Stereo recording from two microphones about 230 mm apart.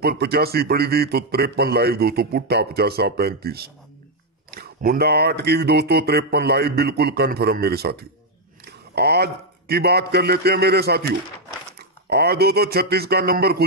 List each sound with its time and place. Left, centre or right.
0.0 s a man's voice: right